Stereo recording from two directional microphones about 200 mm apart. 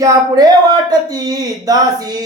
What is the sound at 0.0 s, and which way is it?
Speech, 20° right (ahead or behind).